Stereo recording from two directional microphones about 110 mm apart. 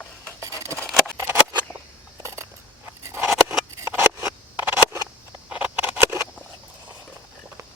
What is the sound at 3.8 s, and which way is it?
Scissors, 25° right (ahead or behind).